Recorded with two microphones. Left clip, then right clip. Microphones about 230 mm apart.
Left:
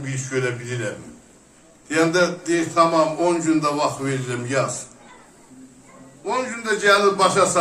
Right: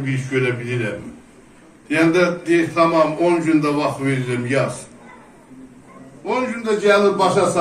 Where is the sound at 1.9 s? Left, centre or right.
Left.